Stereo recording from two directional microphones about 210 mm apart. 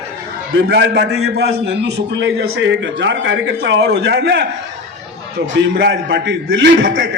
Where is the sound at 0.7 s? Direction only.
55° right (ahead or behind).